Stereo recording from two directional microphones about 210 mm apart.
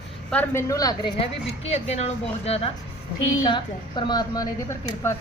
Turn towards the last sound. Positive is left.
turn(degrees=15)  # may be behind; listen again after turning